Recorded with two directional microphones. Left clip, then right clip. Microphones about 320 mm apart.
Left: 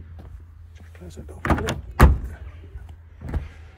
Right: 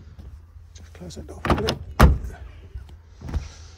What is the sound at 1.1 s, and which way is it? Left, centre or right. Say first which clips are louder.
Speech: right 1 dB; right.